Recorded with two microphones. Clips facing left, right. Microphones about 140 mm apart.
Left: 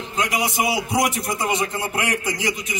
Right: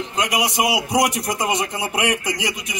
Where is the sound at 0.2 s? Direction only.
15° right (ahead or behind).